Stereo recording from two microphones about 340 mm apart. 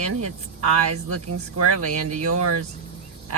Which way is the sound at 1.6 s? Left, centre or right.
Right.